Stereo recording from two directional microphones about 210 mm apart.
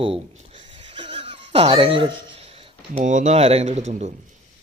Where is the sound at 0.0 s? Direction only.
30° right (ahead or behind).